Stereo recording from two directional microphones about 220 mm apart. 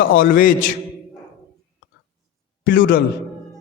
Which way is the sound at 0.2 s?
40° left (ahead or behind).